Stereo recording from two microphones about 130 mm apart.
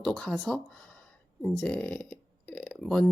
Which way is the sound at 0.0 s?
5° left (ahead or behind).